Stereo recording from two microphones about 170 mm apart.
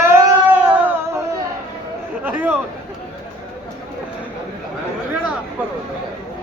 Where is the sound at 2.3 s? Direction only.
10° right (ahead or behind).